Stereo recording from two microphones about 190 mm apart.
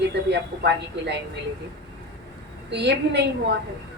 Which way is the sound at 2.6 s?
65° right (ahead or behind).